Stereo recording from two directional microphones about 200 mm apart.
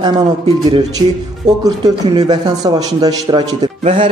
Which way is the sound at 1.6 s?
20° right (ahead or behind).